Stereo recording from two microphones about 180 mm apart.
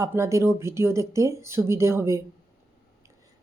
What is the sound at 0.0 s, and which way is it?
Speech, 15° right (ahead or behind).